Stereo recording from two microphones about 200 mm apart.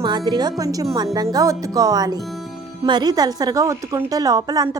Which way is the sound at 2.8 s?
20° right (ahead or behind).